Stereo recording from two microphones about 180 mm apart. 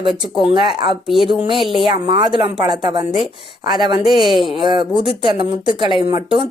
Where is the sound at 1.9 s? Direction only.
25° right (ahead or behind).